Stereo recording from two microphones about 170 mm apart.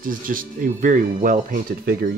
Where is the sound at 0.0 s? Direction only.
55° right (ahead or behind).